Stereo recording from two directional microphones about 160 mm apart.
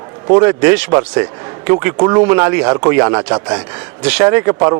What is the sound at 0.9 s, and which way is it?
Speech, 20° right (ahead or behind).